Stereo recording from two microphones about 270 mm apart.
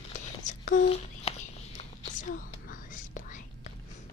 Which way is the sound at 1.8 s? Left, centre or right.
Left.